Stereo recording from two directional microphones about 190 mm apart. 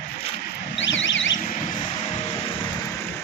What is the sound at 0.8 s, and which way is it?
Vehicle, 75° left (ahead or behind).